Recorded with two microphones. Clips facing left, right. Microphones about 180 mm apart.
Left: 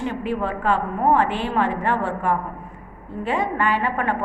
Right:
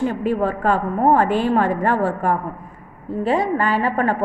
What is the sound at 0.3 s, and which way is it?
A woman's voice, 40° right (ahead or behind).